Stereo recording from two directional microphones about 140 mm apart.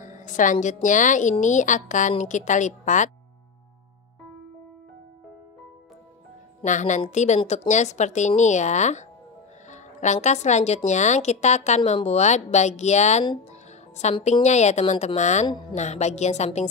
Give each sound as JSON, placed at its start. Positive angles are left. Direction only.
{"t": 0.0, "sound": "a sound", "side_deg": 65}
{"t": 0.8, "sound": "speech", "side_deg": 65}
{"t": 6.6, "sound": "speech", "side_deg": 60}
{"t": 13.5, "sound": "music", "side_deg": 55}
{"t": 14.2, "sound": "a woman's voice", "side_deg": 55}